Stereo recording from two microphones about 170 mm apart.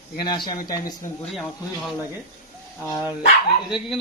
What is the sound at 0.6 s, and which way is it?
Speech, 20° left (ahead or behind).